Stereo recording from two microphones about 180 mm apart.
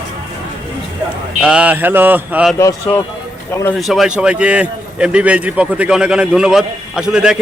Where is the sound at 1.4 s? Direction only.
5° right (ahead or behind).